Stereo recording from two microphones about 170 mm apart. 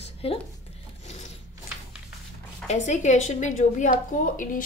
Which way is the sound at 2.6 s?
40° left (ahead or behind).